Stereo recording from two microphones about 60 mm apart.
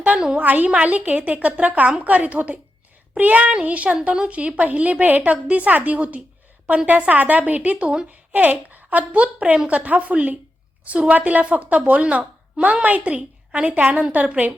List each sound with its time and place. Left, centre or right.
0.2 s a woman's voice: centre
0.4 s a woman's voice: right